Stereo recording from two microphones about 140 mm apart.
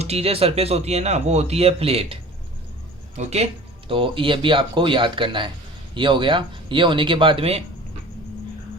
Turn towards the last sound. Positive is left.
turn(degrees=-40)  # may be behind; listen again after turning